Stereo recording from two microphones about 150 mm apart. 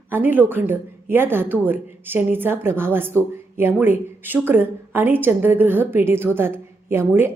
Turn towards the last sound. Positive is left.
turn(degrees=-15)  # may be behind; listen again after turning